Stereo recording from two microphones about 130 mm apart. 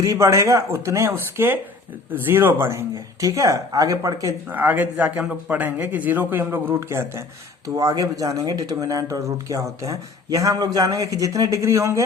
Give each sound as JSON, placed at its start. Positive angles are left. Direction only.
{"t": 0.0, "sound": "speech", "side_deg": -25}
{"t": 4.5, "sound": "a man's voice", "side_deg": -15}